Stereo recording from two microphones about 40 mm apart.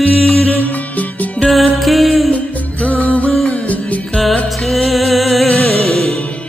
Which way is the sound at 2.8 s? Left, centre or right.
Left.